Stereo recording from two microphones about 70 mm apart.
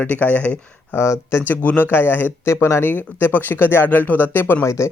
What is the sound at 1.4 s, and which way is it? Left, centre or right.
Speech, left.